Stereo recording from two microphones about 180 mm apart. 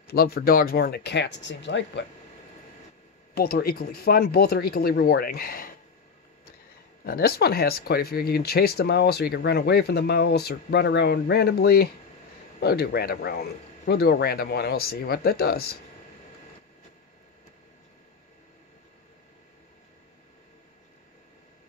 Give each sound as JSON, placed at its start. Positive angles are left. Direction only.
{"t": 0.0, "sound": "speech", "side_deg": 60}
{"t": 3.3, "sound": "speech", "side_deg": 60}
{"t": 7.1, "sound": "speech", "side_deg": 60}